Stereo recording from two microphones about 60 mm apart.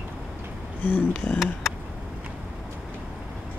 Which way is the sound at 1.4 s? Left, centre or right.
Centre.